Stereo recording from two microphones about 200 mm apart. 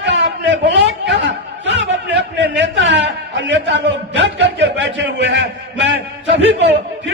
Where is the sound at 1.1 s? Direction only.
65° right (ahead or behind).